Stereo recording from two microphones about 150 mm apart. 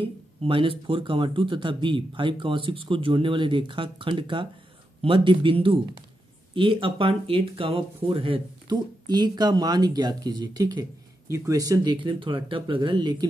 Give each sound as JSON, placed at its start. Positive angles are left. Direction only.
{"t": 0.0, "sound": "speech", "side_deg": -35}